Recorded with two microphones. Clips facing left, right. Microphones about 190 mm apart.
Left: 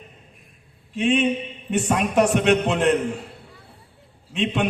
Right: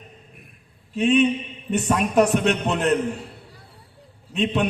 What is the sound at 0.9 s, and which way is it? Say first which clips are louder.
A man's voice: right 2 dB; 40° right (ahead or behind).